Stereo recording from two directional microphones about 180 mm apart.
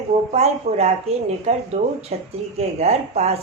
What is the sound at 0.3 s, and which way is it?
Speech, 35° right (ahead or behind).